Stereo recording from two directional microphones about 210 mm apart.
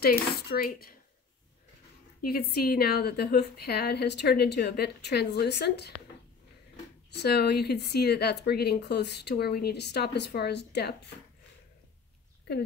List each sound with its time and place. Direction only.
0.0 s speech: 50° left (ahead or behind)
2.2 s speech: 45° left (ahead or behind)
7.2 s speech: 50° left (ahead or behind)